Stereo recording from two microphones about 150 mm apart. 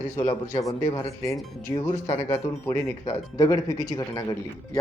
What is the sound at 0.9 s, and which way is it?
Speech, 20° left (ahead or behind).